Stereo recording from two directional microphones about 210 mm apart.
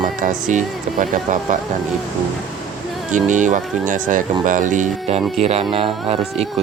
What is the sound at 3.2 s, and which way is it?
Speech, 35° right (ahead or behind).